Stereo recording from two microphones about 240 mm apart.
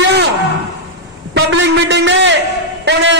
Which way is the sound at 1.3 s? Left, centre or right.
Right.